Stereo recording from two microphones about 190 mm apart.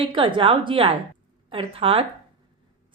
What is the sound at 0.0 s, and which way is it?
A woman's voice, 25° right (ahead or behind).